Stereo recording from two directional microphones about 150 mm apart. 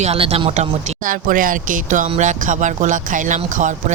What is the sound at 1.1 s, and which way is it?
Speech, 65° right (ahead or behind).